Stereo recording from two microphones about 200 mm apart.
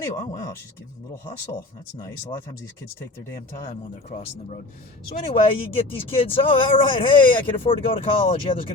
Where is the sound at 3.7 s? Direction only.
40° left (ahead or behind).